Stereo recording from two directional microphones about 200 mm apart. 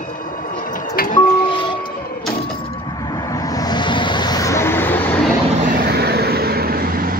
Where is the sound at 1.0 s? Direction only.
45° left (ahead or behind).